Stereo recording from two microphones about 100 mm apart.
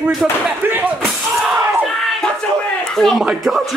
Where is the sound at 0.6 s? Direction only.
20° right (ahead or behind).